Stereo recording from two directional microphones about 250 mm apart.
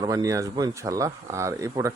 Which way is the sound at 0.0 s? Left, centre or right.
Centre.